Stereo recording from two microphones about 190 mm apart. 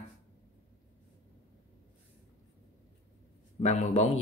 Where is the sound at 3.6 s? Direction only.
35° left (ahead or behind).